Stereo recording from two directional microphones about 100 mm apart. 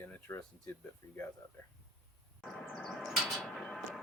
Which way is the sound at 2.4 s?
Centre (ahead or behind).